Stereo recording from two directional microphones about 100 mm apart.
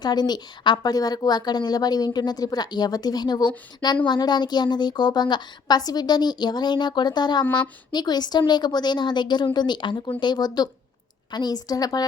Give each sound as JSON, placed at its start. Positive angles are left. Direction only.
{"t": 0.0, "sound": "a woman's voice", "side_deg": 45}